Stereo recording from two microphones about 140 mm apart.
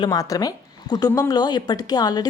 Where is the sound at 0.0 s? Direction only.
25° left (ahead or behind).